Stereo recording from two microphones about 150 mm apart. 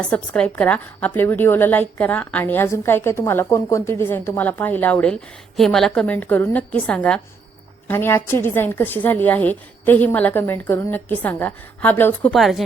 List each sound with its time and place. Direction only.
0.1 s a woman's voice: 10° left (ahead or behind)
12.3 s speech: centre (ahead or behind)